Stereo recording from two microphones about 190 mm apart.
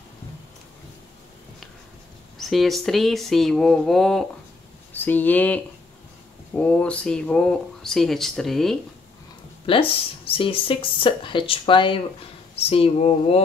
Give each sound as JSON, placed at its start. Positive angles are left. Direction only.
{"t": 2.3, "sound": "speech", "side_deg": 0}
{"t": 9.7, "sound": "speech", "side_deg": 30}